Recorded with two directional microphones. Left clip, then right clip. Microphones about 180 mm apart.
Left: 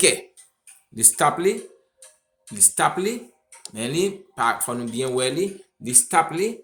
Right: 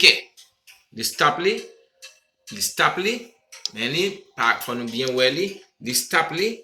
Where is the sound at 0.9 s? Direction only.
60° left (ahead or behind).